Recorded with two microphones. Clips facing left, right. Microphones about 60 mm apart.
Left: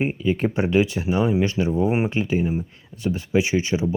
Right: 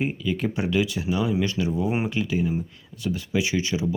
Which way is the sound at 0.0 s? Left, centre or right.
Left.